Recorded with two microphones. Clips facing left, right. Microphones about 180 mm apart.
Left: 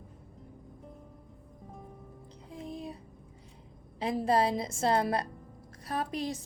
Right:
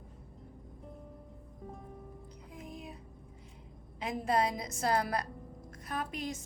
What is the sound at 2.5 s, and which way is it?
Music, 30° left (ahead or behind).